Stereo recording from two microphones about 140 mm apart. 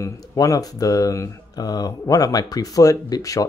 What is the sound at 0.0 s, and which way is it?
Speech, 25° left (ahead or behind).